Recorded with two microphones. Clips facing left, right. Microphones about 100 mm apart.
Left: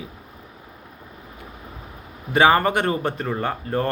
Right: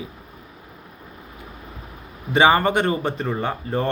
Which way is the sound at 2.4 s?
Centre (ahead or behind).